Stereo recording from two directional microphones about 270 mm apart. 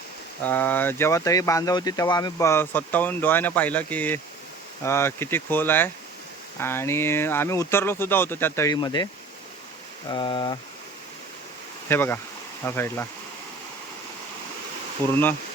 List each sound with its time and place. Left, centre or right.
0.4 s speech: centre
10.1 s speech: centre
11.9 s speech: centre